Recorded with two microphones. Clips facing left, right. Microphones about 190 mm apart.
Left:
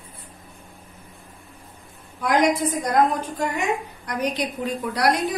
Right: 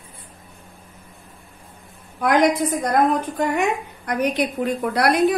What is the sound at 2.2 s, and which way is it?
Speech, 60° right (ahead or behind).